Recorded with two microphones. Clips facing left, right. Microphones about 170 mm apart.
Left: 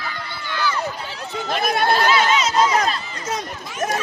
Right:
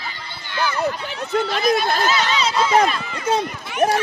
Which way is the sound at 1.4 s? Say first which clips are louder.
Left 3 dB; 55° left (ahead or behind).